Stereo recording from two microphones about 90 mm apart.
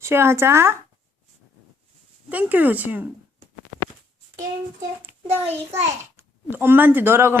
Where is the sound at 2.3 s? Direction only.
20° right (ahead or behind).